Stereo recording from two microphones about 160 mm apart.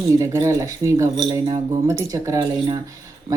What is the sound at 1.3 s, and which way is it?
Speech, 30° right (ahead or behind).